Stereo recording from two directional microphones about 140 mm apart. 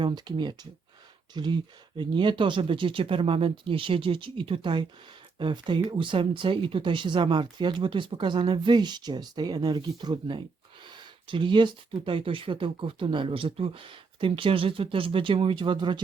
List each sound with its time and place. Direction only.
0.0 s speech: 30° right (ahead or behind)